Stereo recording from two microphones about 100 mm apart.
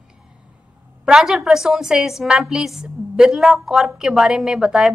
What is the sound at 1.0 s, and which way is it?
A woman's voice, 5° right (ahead or behind).